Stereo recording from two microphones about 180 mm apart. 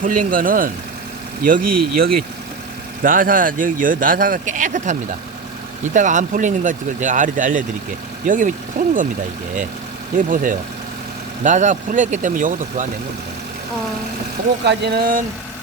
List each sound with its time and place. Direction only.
0.0 s speech: 50° right (ahead or behind)
10.2 s speech: 45° right (ahead or behind)
14.6 s speech: 70° right (ahead or behind)